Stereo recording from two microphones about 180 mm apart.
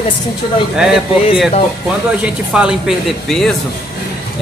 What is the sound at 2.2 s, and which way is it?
Speech, 5° right (ahead or behind).